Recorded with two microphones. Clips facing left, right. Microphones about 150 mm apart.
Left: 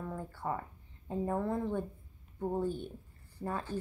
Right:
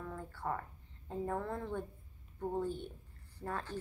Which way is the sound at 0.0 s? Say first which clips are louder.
Left 3 dB; 15° left (ahead or behind).